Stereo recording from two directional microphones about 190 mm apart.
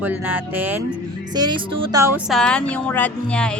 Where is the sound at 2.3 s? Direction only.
5° left (ahead or behind).